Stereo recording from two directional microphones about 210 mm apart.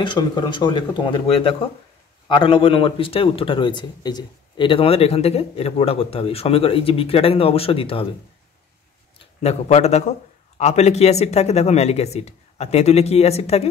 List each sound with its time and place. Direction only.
0.0 s speech: 20° left (ahead or behind)
9.4 s speech: 30° left (ahead or behind)